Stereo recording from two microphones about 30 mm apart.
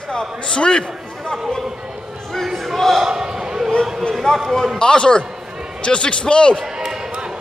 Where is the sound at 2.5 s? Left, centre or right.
Centre.